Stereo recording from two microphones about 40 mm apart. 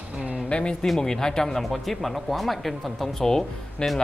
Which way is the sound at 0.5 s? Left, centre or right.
Left.